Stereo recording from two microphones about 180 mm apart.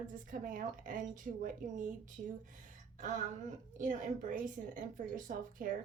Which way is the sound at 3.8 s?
45° right (ahead or behind).